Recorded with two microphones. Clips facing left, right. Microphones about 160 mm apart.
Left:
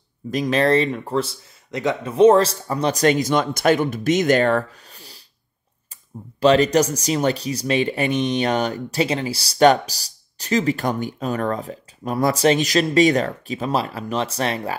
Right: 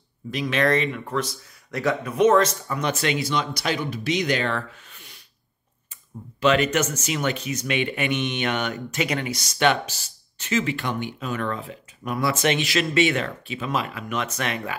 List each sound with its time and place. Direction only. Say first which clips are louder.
0.3 s speech: left 4 dB; 40° left (ahead or behind)
6.4 s speech: left 5 dB; 35° left (ahead or behind)